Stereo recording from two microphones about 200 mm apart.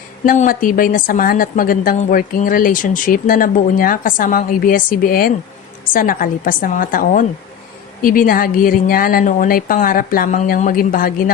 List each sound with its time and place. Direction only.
0.3 s a woman's voice: 40° left (ahead or behind)